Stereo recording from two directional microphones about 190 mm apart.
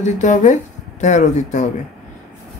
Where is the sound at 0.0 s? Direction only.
40° left (ahead or behind).